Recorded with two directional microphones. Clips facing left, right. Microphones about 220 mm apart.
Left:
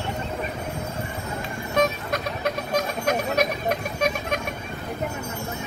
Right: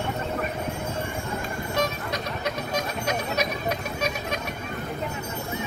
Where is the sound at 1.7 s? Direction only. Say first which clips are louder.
Left 5 dB; 50° left (ahead or behind).